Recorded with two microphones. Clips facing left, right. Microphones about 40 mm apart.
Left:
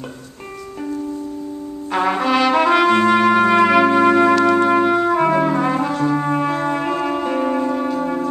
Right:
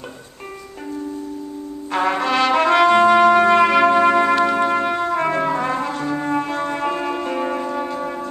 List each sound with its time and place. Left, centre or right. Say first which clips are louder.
1.9 s trumpet: left 2 dB; centre